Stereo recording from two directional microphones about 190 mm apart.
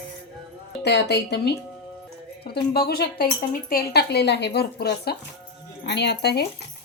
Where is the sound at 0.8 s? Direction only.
65° left (ahead or behind).